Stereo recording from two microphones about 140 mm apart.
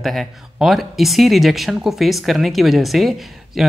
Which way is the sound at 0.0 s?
Centre (ahead or behind).